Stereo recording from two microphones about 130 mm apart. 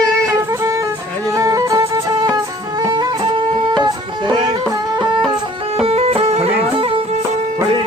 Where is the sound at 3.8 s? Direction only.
35° right (ahead or behind).